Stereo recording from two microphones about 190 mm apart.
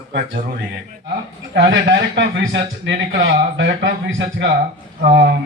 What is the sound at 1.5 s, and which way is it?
Speech, 75° right (ahead or behind).